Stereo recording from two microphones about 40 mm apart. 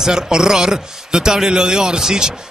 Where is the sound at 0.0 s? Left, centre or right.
Centre.